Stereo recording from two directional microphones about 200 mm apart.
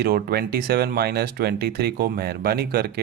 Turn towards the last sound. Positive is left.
turn(degrees=-50)  # may be behind; listen again after turning